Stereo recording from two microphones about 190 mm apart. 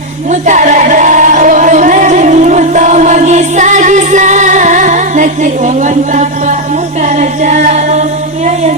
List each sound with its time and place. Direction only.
0.3 s music: 40° right (ahead or behind)
7.2 s a capella: 40° right (ahead or behind)